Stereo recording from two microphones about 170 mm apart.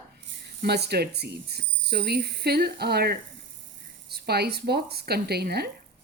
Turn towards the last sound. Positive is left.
turn(degrees=-70)  # may be behind; listen again after turning